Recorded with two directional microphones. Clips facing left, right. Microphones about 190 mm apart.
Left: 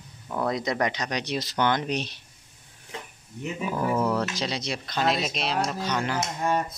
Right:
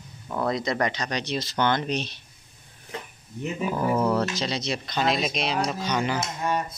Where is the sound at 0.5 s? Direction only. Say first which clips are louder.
Right 1 dB; 15° left (ahead or behind).